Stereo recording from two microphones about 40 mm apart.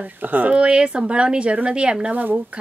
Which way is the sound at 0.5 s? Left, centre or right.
Right.